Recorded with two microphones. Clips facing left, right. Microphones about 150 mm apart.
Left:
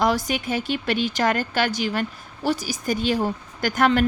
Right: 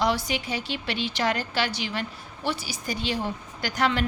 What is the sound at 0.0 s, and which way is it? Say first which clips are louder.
A woman's voice: left 4 dB; 45° left (ahead or behind).